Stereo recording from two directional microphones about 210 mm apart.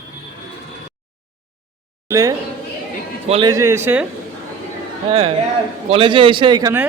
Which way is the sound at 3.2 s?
30° right (ahead or behind).